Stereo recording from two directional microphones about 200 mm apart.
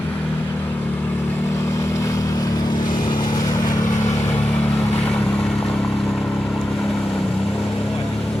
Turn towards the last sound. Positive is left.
turn(degrees=0)  # may be behind; listen again after turning